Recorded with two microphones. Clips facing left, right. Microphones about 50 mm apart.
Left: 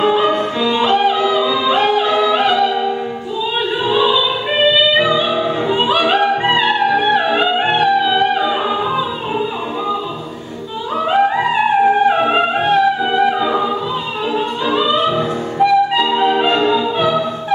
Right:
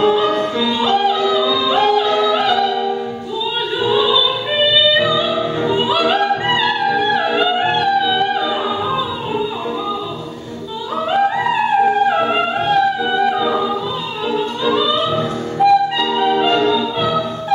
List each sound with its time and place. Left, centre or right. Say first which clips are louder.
0.0 s music: even; centre
3.8 s opera: even; left
11.0 s music: left 2 dB; centre